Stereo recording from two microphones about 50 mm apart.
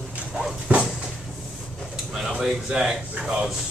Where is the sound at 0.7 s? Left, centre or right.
Right.